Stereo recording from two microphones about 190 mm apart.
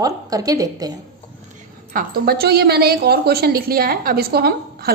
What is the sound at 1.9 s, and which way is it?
A woman's voice, 55° right (ahead or behind).